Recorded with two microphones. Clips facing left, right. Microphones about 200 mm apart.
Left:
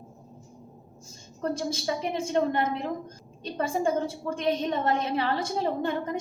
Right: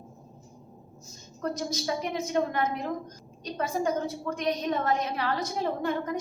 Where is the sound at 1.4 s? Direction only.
30° left (ahead or behind).